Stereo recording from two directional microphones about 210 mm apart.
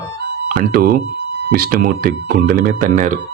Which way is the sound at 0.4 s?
45° right (ahead or behind).